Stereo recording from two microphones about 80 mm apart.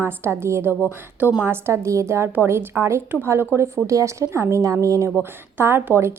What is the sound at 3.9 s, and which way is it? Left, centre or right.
A woman's voice, right.